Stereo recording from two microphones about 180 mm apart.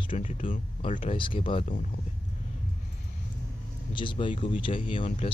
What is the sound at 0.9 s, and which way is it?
Speech, 35° left (ahead or behind).